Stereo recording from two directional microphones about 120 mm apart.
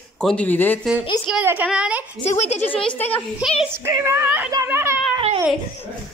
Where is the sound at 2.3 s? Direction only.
65° left (ahead or behind).